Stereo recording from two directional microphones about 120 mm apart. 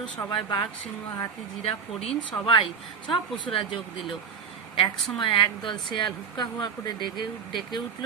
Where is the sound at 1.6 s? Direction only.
55° left (ahead or behind).